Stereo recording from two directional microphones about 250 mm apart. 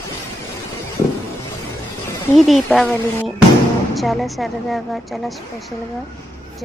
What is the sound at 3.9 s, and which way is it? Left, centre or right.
Speech, centre.